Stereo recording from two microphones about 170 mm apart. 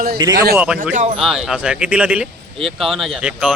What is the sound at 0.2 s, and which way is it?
Speech, 20° right (ahead or behind).